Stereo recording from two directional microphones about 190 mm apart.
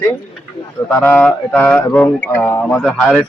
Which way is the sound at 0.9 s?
10° left (ahead or behind).